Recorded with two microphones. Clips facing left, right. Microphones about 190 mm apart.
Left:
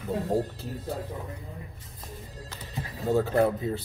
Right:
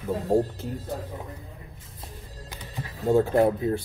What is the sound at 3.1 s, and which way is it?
Speech, 15° right (ahead or behind).